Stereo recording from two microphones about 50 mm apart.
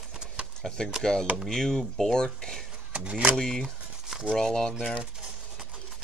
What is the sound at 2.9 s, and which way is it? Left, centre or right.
Speech, right.